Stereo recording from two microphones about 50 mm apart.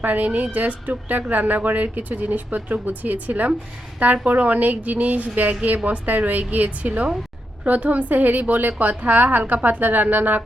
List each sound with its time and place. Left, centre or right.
0.0 s a woman's voice: right